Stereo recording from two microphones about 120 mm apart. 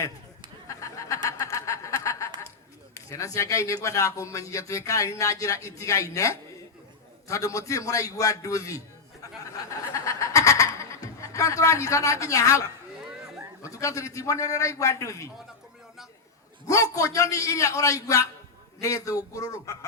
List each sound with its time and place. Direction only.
0.7 s snicker: 30° left (ahead or behind)
2.9 s a man's voice: 25° left (ahead or behind)
9.4 s a sound: 25° left (ahead or behind)
10.8 s a man's voice: 25° left (ahead or behind)
16.6 s a man's voice: 30° left (ahead or behind)